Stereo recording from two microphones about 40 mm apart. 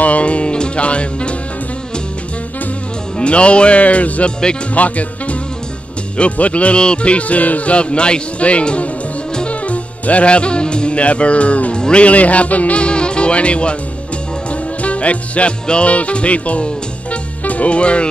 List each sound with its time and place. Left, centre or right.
0.0 s music: left
3.2 s speech: left
9.5 s music: left
11.8 s speech: left
14.5 s music: left
15.6 s speech: left